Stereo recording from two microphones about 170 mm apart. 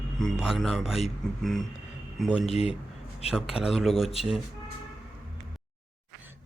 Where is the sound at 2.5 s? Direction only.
35° left (ahead or behind).